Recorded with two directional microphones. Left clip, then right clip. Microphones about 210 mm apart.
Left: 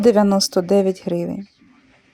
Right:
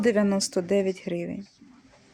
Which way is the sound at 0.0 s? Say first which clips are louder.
Left 9 dB; 25° left (ahead or behind).